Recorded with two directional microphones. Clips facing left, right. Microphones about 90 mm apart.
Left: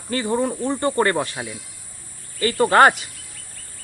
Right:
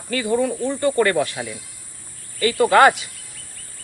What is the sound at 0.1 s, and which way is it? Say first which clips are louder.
Speech: right 1 dB; 35° left (ahead or behind).